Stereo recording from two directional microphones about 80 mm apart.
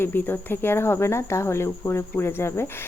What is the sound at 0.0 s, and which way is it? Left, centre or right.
Speech, left.